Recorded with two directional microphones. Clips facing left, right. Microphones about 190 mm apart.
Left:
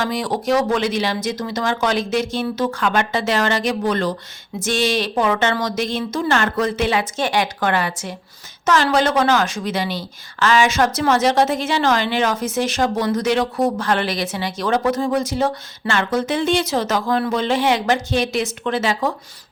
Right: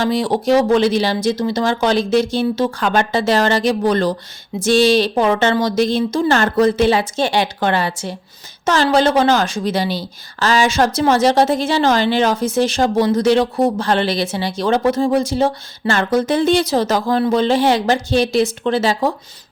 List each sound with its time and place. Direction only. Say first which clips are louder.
0.0 s a woman's voice: right 5 dB; 30° right (ahead or behind)